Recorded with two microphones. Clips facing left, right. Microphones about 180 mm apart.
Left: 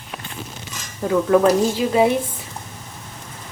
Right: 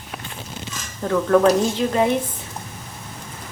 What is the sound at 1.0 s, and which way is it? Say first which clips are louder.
Speech: left 1 dB; 5° left (ahead or behind).